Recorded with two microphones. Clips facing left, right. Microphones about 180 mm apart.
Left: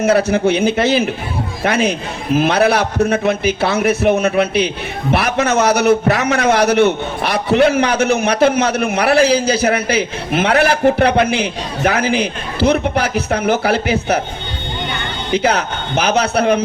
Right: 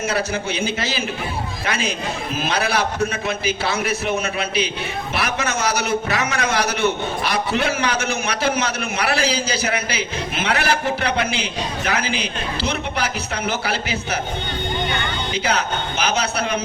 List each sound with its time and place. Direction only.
0.0 s a man's voice: 60° left (ahead or behind)
15.3 s a man's voice: 55° left (ahead or behind)